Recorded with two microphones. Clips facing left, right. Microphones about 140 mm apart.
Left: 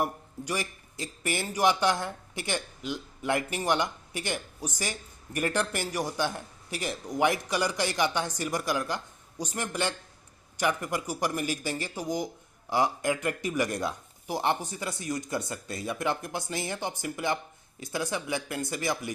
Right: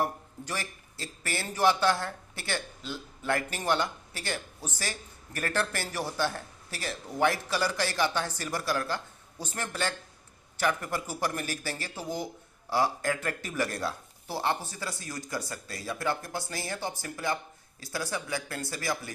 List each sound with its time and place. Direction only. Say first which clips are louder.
0.0 s speech: even; 15° left (ahead or behind)